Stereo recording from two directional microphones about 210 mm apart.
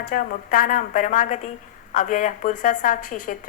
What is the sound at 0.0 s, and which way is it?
A woman's voice, 45° left (ahead or behind).